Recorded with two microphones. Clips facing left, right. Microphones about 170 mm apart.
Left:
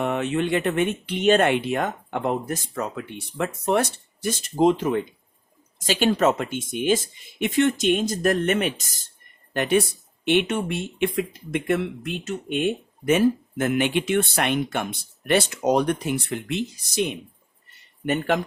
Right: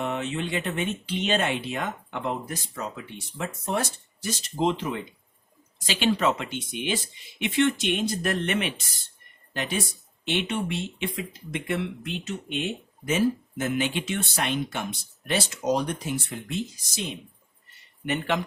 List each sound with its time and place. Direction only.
0.0 s speech: 55° left (ahead or behind)
9.5 s speech: 60° left (ahead or behind)
18.0 s speech: 45° left (ahead or behind)